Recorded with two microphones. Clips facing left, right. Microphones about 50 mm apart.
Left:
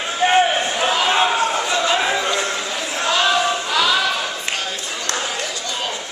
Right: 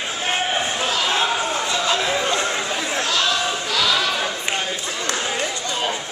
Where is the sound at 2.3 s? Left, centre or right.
Centre.